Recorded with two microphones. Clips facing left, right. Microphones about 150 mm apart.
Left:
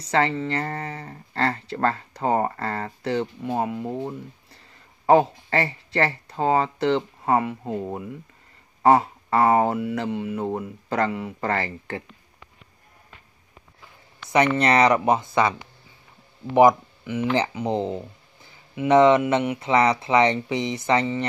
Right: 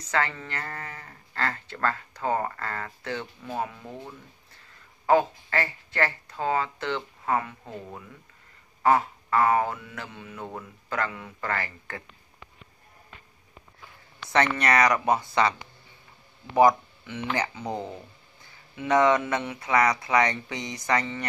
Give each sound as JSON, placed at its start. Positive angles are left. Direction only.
{"t": 0.1, "sound": "speech", "side_deg": 30}
{"t": 5.0, "sound": "speech", "side_deg": 25}
{"t": 7.7, "sound": "speech", "side_deg": 45}
{"t": 8.8, "sound": "speech", "side_deg": 30}
{"t": 14.3, "sound": "speech", "side_deg": 20}
{"t": 17.3, "sound": "speech", "side_deg": 25}